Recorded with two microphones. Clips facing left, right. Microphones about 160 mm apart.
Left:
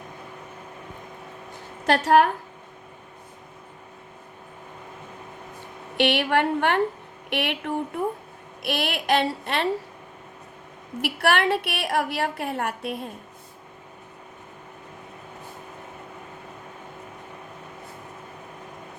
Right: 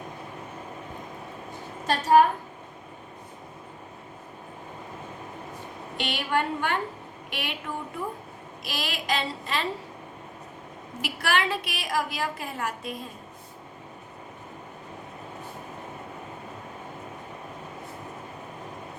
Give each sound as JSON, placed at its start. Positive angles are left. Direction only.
{"t": 1.9, "sound": "a woman's voice", "side_deg": 75}
{"t": 6.0, "sound": "a woman's voice", "side_deg": 65}
{"t": 11.0, "sound": "a woman's voice", "side_deg": 60}